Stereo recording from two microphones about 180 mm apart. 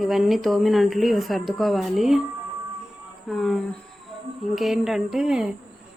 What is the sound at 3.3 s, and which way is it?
Speech, centre (ahead or behind).